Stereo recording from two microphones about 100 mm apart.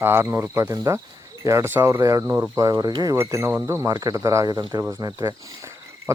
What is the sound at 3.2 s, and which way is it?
Speech, 25° right (ahead or behind).